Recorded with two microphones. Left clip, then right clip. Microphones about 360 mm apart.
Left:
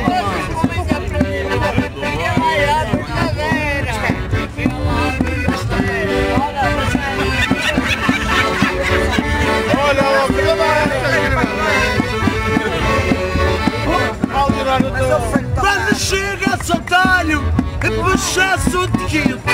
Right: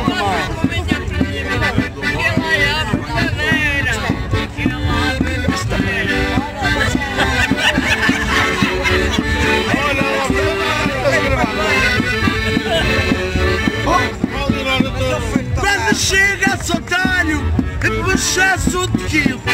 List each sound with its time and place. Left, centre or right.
3.4 s music: centre
11.9 s music: centre
15.6 s music: centre